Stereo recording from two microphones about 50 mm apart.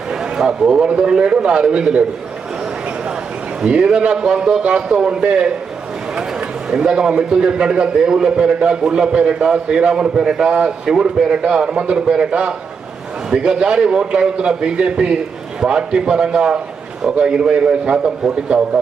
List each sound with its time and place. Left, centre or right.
0.1 s a sound: centre
0.9 s a man's voice: centre
3.6 s a man's voice: centre
6.7 s a man's voice: centre